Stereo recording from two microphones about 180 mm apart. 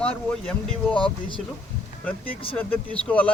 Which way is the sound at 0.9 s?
30° left (ahead or behind).